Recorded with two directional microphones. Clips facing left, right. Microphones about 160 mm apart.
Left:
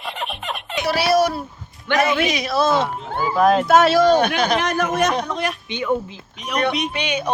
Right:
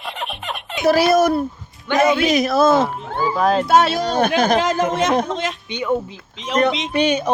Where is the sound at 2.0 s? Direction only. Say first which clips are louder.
Right 3 dB; 20° right (ahead or behind).